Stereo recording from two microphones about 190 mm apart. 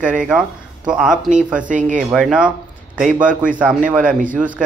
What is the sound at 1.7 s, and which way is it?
Speech, 40° right (ahead or behind).